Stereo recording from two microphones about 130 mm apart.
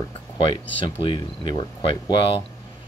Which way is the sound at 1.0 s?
35° left (ahead or behind).